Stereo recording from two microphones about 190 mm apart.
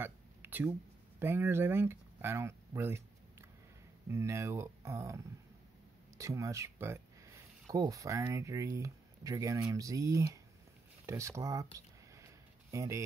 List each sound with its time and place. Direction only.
0.0 s a sound: 10° right (ahead or behind)
1.2 s speech: 10° right (ahead or behind)
12.7 s speech: 15° right (ahead or behind)